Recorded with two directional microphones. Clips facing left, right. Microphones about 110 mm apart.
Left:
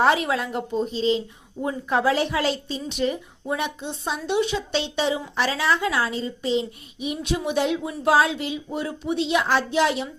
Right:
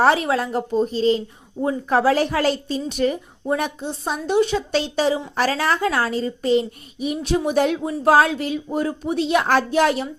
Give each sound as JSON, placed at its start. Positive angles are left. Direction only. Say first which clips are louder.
{"t": 0.0, "sound": "a woman's voice", "louder": "right 3 dB", "side_deg": -35}